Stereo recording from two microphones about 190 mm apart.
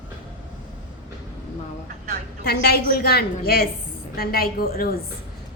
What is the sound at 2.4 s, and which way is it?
A woman's voice, 55° left (ahead or behind).